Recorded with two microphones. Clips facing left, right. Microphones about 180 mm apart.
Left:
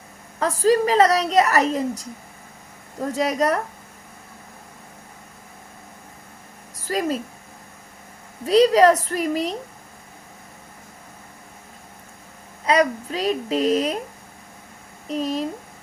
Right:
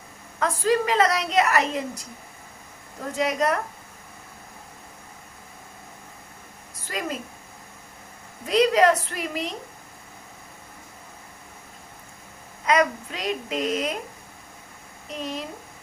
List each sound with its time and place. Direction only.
0.3 s a woman's voice: 35° left (ahead or behind)
6.8 s a woman's voice: 35° left (ahead or behind)
8.4 s a woman's voice: 35° left (ahead or behind)
12.6 s a woman's voice: 35° left (ahead or behind)
15.0 s speech: 40° left (ahead or behind)